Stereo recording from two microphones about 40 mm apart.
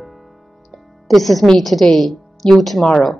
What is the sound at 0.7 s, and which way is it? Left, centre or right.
Music, centre.